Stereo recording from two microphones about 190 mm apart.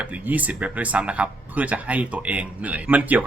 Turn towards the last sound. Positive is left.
turn(degrees=-10)  # may be behind; listen again after turning